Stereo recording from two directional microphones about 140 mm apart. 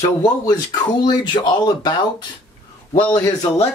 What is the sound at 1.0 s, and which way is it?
Speech, 30° left (ahead or behind).